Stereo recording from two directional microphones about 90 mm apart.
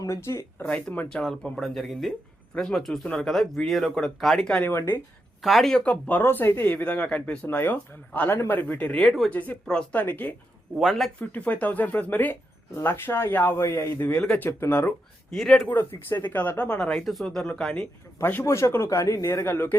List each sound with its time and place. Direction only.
0.0 s speech: 35° left (ahead or behind)
1.1 s speech: centre (ahead or behind)
4.5 s speech: 20° left (ahead or behind)
5.4 s speech: centre (ahead or behind)
5.8 s speech: 15° left (ahead or behind)
9.0 s speech: 5° left (ahead or behind)
9.3 s speech: 20° left (ahead or behind)
10.0 s speech: 20° left (ahead or behind)
10.8 s speech: centre (ahead or behind)
11.2 s speech: 15° left (ahead or behind)
15.3 s speech: centre (ahead or behind)
16.0 s speech: 20° left (ahead or behind)
18.2 s speech: 25° left (ahead or behind)
19.5 s speech: 20° left (ahead or behind)